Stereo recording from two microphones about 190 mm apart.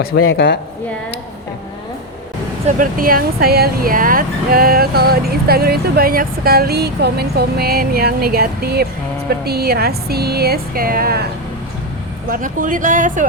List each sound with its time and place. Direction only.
0.3 s speech: 60° left (ahead or behind)
2.6 s speech: 45° right (ahead or behind)
12.3 s speech: 45° right (ahead or behind)